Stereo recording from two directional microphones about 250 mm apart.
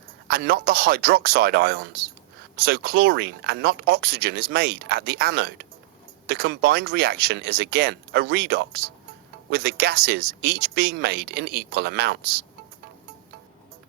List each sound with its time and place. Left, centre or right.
0.3 s speech: right